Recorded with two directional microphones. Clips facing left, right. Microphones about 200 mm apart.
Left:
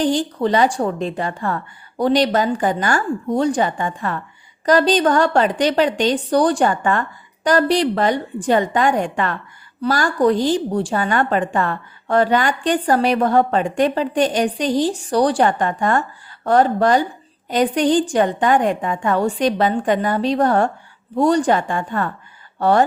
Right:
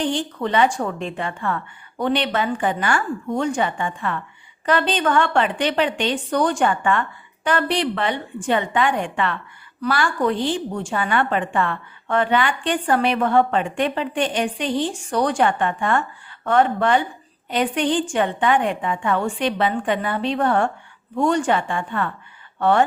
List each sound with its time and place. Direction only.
0.0 s a woman's voice: 35° left (ahead or behind)